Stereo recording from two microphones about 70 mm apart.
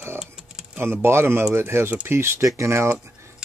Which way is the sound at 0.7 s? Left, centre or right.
Right.